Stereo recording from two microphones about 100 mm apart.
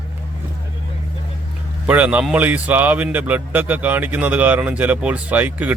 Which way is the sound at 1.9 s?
15° right (ahead or behind).